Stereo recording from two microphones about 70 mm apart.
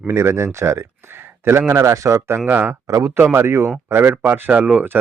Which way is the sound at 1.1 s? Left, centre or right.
Right.